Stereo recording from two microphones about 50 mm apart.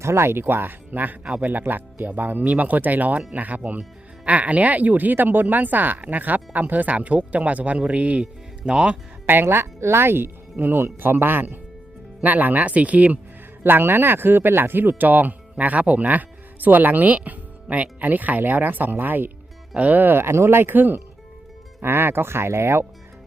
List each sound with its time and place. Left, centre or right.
0.0 s speech: right
9.2 s speech: right
13.6 s speech: right